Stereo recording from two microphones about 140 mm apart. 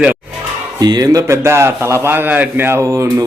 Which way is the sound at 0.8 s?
30° right (ahead or behind).